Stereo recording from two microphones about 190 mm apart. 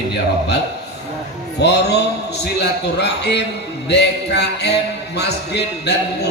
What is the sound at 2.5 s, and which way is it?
Music, 60° left (ahead or behind).